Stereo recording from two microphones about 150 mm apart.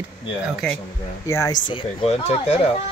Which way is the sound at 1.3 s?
20° left (ahead or behind).